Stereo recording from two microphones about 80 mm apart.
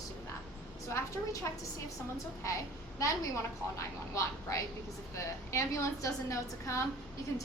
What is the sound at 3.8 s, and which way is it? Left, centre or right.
A woman's voice, left.